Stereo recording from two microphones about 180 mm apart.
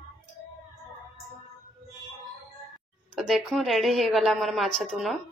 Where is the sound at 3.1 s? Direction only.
Centre (ahead or behind).